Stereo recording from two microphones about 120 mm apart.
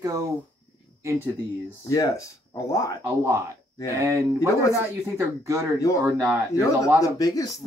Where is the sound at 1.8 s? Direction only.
25° left (ahead or behind).